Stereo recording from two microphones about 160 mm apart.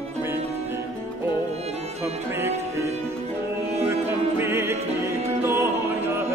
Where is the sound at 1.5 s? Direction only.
40° right (ahead or behind).